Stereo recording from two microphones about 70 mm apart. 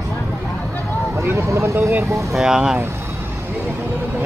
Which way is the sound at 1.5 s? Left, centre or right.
Right.